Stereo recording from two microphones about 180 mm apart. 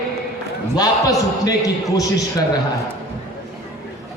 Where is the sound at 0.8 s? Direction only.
20° left (ahead or behind).